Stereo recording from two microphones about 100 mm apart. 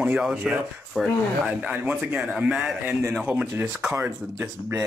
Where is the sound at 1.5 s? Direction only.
15° right (ahead or behind).